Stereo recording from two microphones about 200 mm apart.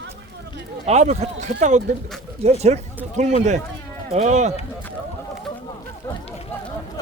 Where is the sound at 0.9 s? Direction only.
35° right (ahead or behind).